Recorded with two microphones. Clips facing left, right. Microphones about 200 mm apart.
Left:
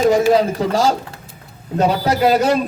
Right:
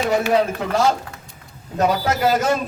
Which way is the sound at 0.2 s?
35° left (ahead or behind).